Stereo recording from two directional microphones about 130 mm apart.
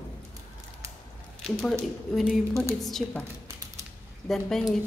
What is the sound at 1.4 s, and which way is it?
A woman's voice, 5° left (ahead or behind).